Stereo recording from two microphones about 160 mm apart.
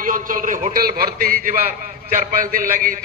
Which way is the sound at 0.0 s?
60° right (ahead or behind).